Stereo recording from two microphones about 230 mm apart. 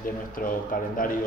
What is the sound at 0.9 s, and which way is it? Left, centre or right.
Speech, left.